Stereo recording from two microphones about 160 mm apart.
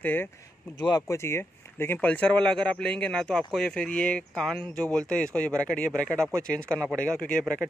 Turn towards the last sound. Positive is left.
turn(degrees=5)  # may be behind; listen again after turning